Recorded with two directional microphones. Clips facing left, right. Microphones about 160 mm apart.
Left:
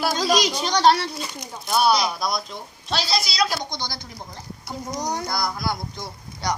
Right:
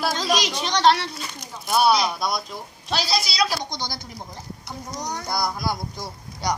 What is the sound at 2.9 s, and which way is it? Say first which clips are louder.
Speech: even; 10° right (ahead or behind).